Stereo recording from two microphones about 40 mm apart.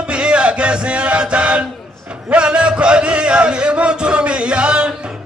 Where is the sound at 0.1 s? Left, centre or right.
Right.